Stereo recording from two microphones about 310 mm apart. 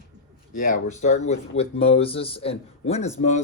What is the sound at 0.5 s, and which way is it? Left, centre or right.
Speech, left.